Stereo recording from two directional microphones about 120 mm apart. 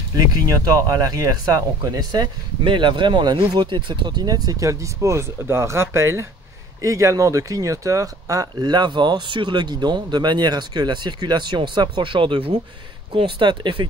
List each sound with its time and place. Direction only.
0.1 s speech: 30° right (ahead or behind)